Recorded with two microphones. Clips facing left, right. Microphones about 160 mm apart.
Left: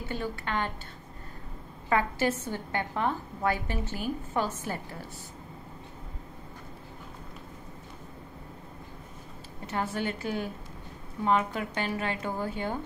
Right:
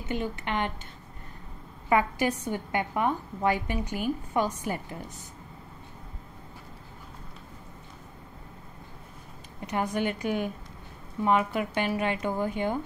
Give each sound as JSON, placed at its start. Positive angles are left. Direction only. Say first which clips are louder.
{"t": 0.0, "sound": "a woman's voice", "louder": "right 2 dB", "side_deg": -20}
{"t": 1.9, "sound": "a woman's voice", "louder": "right 2 dB", "side_deg": -15}
{"t": 9.7, "sound": "a woman's voice", "louder": "right 3 dB", "side_deg": -15}